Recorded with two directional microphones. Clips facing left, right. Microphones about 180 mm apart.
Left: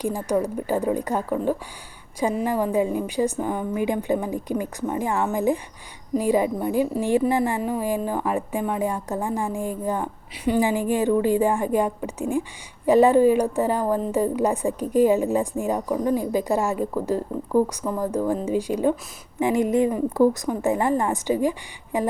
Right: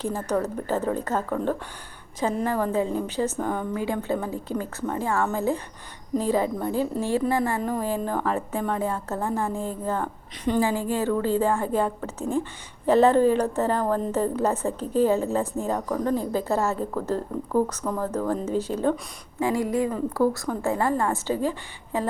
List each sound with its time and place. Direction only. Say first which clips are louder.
0.0 s a woman's voice: left 2 dB; 10° left (ahead or behind)